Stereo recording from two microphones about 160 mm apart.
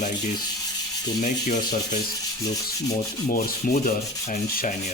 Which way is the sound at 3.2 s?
65° left (ahead or behind).